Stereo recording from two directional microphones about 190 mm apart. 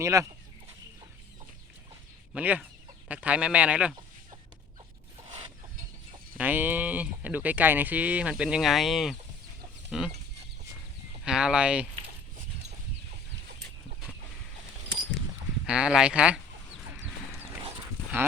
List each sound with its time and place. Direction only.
0.0 s speech: 15° right (ahead or behind)
2.3 s speech: 5° right (ahead or behind)
6.3 s speech: 10° right (ahead or behind)
11.2 s speech: 5° right (ahead or behind)
15.6 s speech: 5° right (ahead or behind)